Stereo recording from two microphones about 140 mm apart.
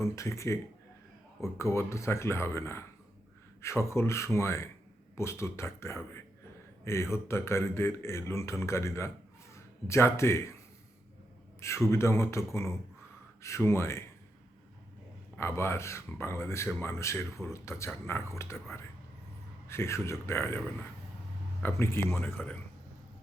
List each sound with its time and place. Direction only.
0.0 s speech: 20° left (ahead or behind)
11.9 s speech: 20° left (ahead or behind)
15.4 s speech: 20° left (ahead or behind)
21.6 s speech: 20° left (ahead or behind)